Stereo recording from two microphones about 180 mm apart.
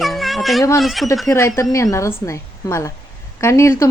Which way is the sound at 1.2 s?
15° left (ahead or behind).